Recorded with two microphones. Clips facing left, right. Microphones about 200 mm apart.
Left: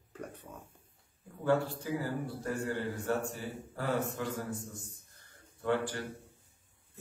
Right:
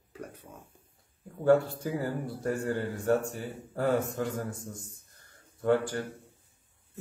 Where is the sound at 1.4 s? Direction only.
50° right (ahead or behind).